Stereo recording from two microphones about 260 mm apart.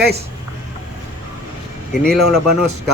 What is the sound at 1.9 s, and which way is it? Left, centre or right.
Speech, centre.